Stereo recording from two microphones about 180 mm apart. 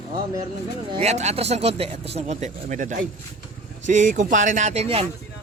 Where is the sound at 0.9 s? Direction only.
40° right (ahead or behind).